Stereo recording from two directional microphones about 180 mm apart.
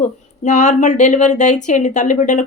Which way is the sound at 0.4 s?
40° left (ahead or behind).